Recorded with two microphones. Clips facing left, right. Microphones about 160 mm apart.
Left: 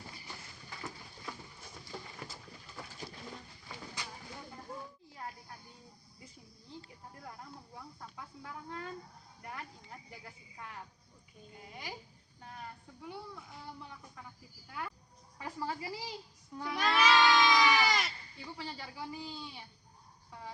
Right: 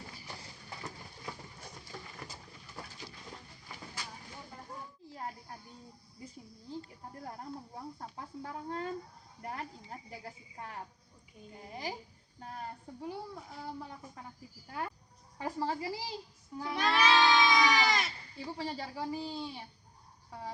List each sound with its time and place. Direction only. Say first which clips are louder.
7.2 s speech: right 7 dB; 35° right (ahead or behind)
16.7 s goat: even; centre (ahead or behind)
18.4 s speech: right 6 dB; 35° right (ahead or behind)